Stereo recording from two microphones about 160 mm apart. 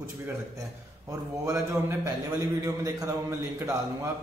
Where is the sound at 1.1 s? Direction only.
20° right (ahead or behind).